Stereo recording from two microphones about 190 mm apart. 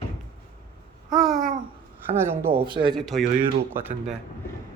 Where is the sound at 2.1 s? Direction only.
10° right (ahead or behind).